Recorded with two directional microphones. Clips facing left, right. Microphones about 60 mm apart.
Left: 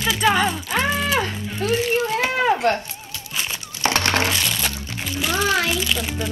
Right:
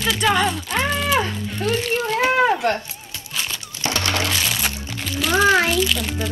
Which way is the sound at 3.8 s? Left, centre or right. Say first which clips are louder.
Left 3 dB; left.